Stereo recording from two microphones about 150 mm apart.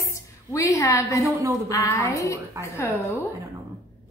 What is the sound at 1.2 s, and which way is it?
Speech, 20° right (ahead or behind).